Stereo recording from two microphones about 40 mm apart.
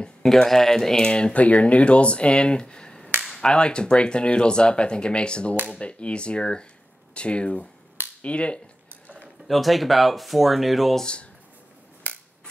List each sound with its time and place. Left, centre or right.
0.2 s speech: centre
1.3 s speech: left
9.5 s speech: centre